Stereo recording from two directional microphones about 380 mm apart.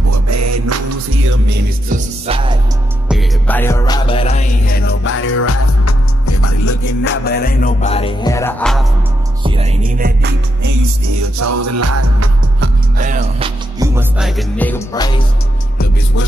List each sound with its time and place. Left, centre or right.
0.1 s music: right
1.5 s music: centre
3.1 s music: centre; by 6.9 s left
7.1 s music: left; by 8.8 s centre
9.4 s music: centre
10.7 s music: right
12.5 s music: right
13.7 s music: centre